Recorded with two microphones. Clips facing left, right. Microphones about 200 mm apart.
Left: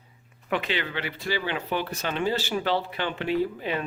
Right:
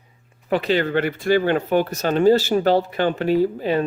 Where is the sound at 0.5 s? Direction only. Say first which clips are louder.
Right 9 dB; 40° right (ahead or behind).